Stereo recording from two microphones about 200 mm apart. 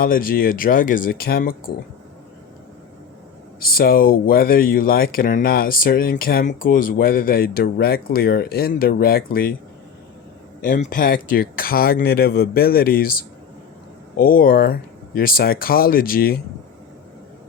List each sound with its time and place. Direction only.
0.0 s speech: 45° left (ahead or behind)
3.6 s speech: 45° left (ahead or behind)
10.6 s speech: 40° left (ahead or behind)